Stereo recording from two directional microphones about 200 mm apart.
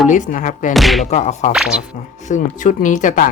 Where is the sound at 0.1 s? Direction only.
40° left (ahead or behind).